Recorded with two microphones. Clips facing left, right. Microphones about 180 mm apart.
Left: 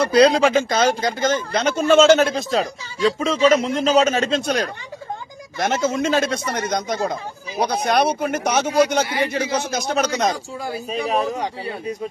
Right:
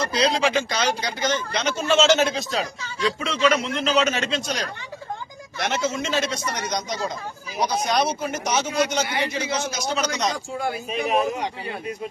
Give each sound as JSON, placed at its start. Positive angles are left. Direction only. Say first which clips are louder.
{"t": 0.1, "sound": "a man's voice", "louder": "left 8 dB", "side_deg": 55}
{"t": 10.7, "sound": "a man's voice", "louder": "left 2 dB", "side_deg": 35}